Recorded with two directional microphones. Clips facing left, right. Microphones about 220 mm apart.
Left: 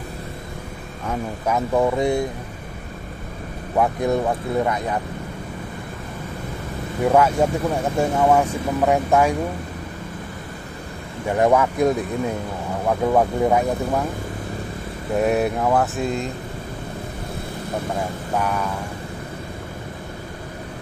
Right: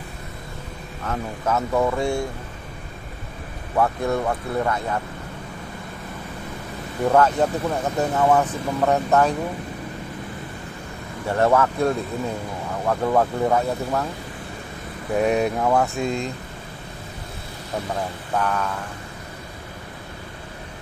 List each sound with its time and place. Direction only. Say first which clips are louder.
1.0 s speech: left 1 dB; 15° left (ahead or behind)
3.7 s speech: left 2 dB; 15° left (ahead or behind)
7.1 s speech: left 1 dB; 10° left (ahead or behind)
11.2 s speech: left 1 dB; 15° left (ahead or behind)
15.1 s speech: left 1 dB; centre (ahead or behind)
18.3 s speech: even; 10° left (ahead or behind)